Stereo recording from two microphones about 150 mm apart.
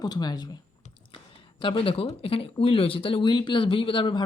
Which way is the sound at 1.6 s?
35° left (ahead or behind).